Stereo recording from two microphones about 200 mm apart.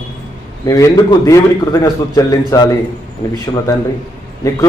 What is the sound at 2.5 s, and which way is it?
Speech, 15° left (ahead or behind).